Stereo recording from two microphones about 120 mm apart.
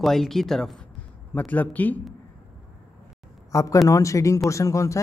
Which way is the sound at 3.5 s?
25° left (ahead or behind).